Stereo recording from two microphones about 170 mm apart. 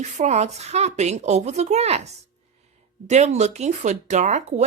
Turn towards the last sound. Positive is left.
turn(degrees=-40)  # may be behind; listen again after turning